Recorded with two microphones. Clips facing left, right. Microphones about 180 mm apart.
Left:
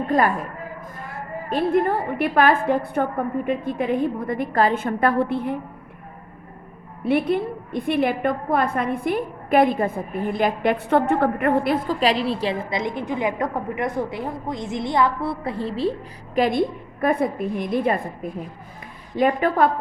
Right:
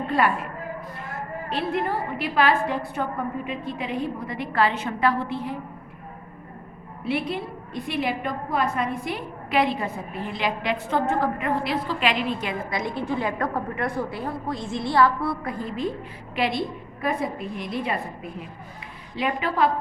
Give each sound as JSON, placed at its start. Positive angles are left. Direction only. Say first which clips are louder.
{"t": 0.1, "sound": "a woman's voice", "louder": "left 3 dB", "side_deg": 40}
{"t": 1.5, "sound": "a woman's voice", "louder": "left 7 dB", "side_deg": 50}
{"t": 7.0, "sound": "a woman's voice", "louder": "left 7 dB", "side_deg": 55}